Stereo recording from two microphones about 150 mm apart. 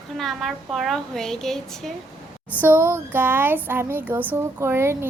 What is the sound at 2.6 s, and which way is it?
Speech, 15° right (ahead or behind).